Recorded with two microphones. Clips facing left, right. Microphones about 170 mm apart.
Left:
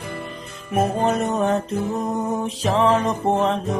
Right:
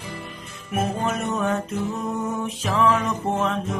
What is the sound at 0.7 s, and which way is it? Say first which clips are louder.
Music: left 5 dB; 35° left (ahead or behind).